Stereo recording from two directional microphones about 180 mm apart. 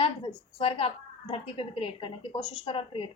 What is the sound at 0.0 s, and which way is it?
A woman's voice, 30° left (ahead or behind).